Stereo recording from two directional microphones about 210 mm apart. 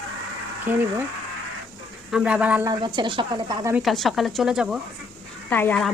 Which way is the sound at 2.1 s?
5° right (ahead or behind).